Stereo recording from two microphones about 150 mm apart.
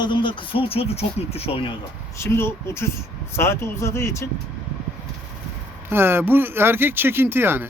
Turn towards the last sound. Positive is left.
turn(degrees=-15)  # may be behind; listen again after turning